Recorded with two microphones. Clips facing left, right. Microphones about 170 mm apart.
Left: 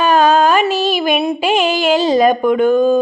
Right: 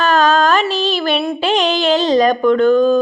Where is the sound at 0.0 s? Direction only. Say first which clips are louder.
Left 2 dB; 10° left (ahead or behind).